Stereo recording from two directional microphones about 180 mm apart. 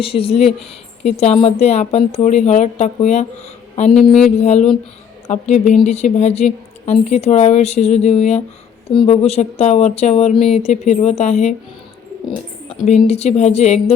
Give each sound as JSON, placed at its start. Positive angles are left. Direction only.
{"t": 0.0, "sound": "a woman's voice", "side_deg": 30}
{"t": 4.4, "sound": "a woman's voice", "side_deg": 40}
{"t": 10.4, "sound": "a sound", "side_deg": 0}
{"t": 10.7, "sound": "a woman's voice", "side_deg": 35}
{"t": 12.8, "sound": "a woman's voice", "side_deg": 40}